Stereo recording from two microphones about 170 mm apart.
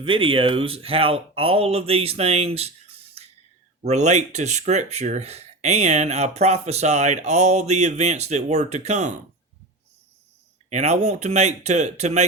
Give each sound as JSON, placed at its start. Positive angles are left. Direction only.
{"t": 0.0, "sound": "speech", "side_deg": -30}
{"t": 10.7, "sound": "speech", "side_deg": -45}